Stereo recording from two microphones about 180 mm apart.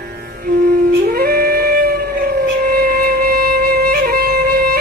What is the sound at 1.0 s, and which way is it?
Howl, 60° right (ahead or behind).